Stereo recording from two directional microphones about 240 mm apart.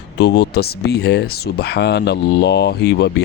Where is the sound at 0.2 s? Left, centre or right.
Left.